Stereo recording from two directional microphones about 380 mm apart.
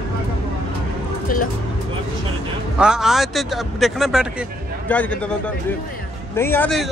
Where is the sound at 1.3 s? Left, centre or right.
Left.